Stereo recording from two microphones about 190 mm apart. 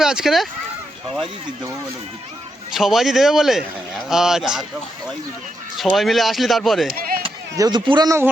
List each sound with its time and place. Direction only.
0.0 s speech: 5° right (ahead or behind)
2.7 s speech: centre (ahead or behind)
5.7 s speech: centre (ahead or behind)
6.9 s chop: 50° right (ahead or behind)
7.5 s a man's voice: 20° right (ahead or behind)